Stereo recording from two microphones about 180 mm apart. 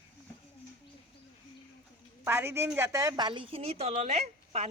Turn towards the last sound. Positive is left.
turn(degrees=-35)  # may be behind; listen again after turning